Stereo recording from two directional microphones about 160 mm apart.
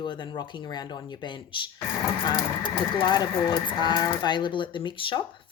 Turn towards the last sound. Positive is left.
turn(degrees=30)  # may be behind; listen again after turning